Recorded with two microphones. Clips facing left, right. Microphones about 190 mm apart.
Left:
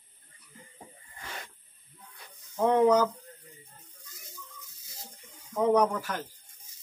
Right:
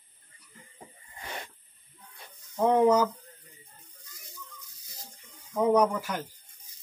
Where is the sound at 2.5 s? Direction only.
5° right (ahead or behind).